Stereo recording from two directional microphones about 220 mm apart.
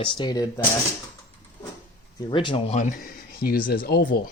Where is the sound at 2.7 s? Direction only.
35° left (ahead or behind).